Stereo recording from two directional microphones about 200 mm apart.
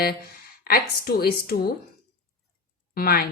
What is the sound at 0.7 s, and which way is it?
Speech, 50° left (ahead or behind).